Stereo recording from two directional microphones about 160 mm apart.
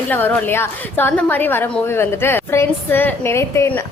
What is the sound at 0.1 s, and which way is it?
A woman's voice, 10° left (ahead or behind).